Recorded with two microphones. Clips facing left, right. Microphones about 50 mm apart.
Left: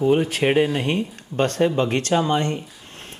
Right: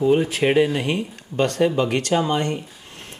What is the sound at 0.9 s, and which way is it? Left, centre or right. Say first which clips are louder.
Speech: left 1 dB; left.